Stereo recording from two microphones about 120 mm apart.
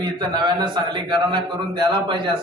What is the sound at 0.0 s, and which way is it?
A man's voice, 35° right (ahead or behind).